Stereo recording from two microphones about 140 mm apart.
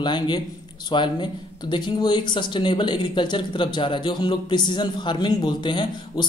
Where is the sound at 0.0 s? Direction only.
35° left (ahead or behind).